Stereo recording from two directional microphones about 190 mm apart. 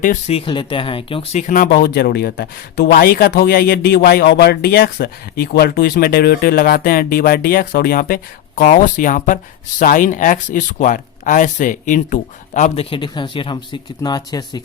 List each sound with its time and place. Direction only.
0.0 s speech: 35° left (ahead or behind); by 14.6 s 20° left (ahead or behind)